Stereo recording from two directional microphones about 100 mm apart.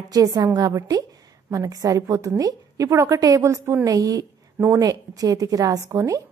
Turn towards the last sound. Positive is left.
turn(degrees=-30)  # may be behind; listen again after turning